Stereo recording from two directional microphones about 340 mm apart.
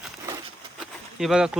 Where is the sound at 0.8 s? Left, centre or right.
Centre.